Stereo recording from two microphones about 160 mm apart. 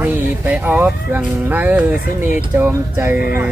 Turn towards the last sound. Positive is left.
turn(degrees=-10)  # may be behind; listen again after turning